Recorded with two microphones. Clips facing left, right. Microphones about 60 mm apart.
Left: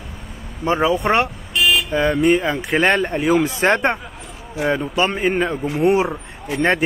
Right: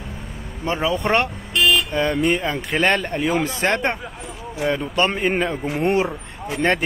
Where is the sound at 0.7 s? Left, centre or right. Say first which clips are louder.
Left 4 dB; left.